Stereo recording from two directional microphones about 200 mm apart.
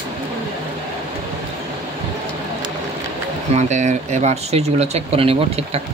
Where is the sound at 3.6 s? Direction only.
35° right (ahead or behind).